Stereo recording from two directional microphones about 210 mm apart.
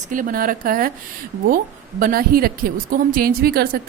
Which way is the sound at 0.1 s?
40° right (ahead or behind).